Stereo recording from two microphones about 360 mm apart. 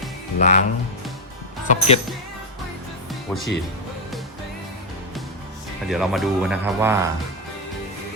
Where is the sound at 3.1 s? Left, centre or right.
Centre.